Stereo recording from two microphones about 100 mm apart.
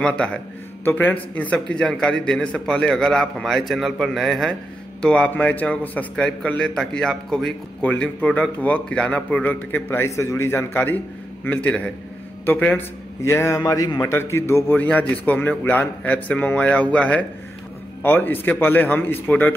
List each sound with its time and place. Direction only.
0.0 s a man's voice: 10° left (ahead or behind)
5.0 s a man's voice: 10° left (ahead or behind)
13.6 s a man's voice: 40° left (ahead or behind)
14.1 s a man's voice: 25° left (ahead or behind)